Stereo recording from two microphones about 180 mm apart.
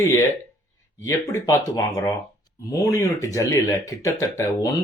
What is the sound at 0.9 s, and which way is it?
Speech, 15° left (ahead or behind).